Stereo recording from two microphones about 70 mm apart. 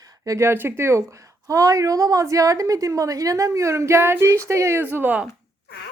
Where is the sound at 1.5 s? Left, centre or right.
Right.